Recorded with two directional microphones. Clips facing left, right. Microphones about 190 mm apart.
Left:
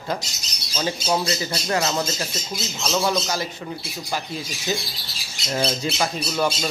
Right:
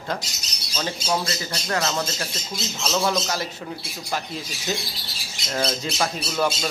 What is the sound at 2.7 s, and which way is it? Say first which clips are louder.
Speech: left 1 dB; centre (ahead or behind).